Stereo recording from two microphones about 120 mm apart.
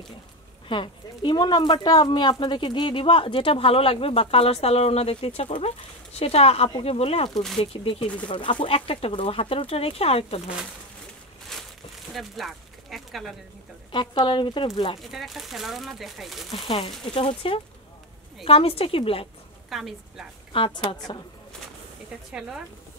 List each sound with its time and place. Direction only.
0.7 s speech: 40° left (ahead or behind); by 10.4 s 55° left (ahead or behind)
11.5 s a sound: 5° left (ahead or behind)
12.1 s speech: centre (ahead or behind)
13.9 s speech: 45° left (ahead or behind)
15.0 s speech: centre (ahead or behind)
16.6 s speech: 50° left (ahead or behind)
19.7 s speech: centre (ahead or behind)
20.5 s speech: 45° left (ahead or behind)